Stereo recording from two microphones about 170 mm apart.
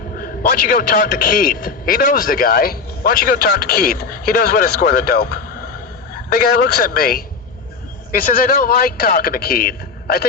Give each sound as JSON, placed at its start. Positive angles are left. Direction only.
{"t": 0.2, "sound": "a man's voice", "side_deg": 55}